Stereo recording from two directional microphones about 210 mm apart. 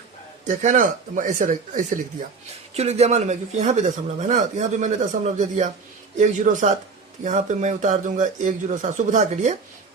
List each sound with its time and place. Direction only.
0.4 s speech: 35° right (ahead or behind)